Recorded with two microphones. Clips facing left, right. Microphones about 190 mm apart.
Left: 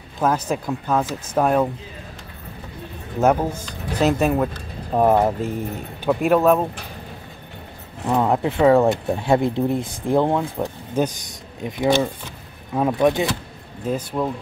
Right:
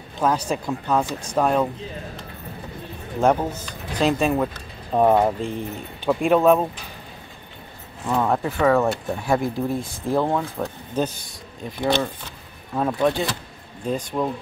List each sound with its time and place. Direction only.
0.2 s speech: 5° left (ahead or behind)
3.2 s speech: 10° left (ahead or behind)
8.1 s speech: 20° left (ahead or behind)
13.8 s speech: 5° left (ahead or behind)